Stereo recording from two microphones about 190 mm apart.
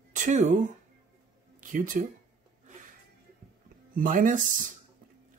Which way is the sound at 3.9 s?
45° right (ahead or behind).